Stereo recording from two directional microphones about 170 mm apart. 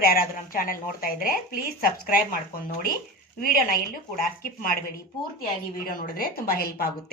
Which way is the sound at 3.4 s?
55° left (ahead or behind).